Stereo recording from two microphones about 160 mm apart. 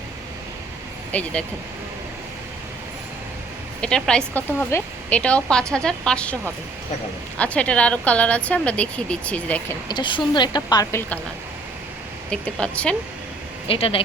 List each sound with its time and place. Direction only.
1.1 s speech: 5° left (ahead or behind)
3.8 s speech: 5° left (ahead or behind)
7.3 s speech: 10° left (ahead or behind)
9.9 s a woman's voice: 30° left (ahead or behind)
12.3 s speech: 5° left (ahead or behind)
13.7 s speech: 35° left (ahead or behind)